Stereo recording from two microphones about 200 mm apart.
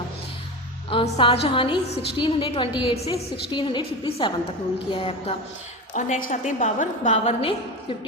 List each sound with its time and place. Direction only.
0.9 s a woman's voice: 30° left (ahead or behind)
5.9 s a woman's voice: 40° left (ahead or behind)